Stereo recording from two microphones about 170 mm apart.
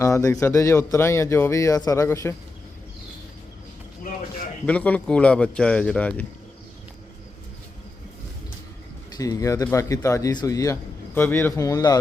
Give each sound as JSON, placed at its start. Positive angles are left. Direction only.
{"t": 0.0, "sound": "speech", "side_deg": 20}
{"t": 4.6, "sound": "speech", "side_deg": 10}
{"t": 9.1, "sound": "a man's voice", "side_deg": 20}